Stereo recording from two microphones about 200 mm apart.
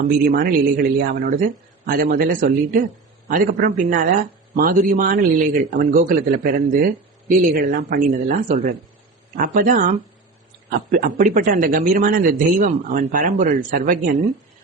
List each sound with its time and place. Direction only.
0.0 s a man's voice: 50° right (ahead or behind)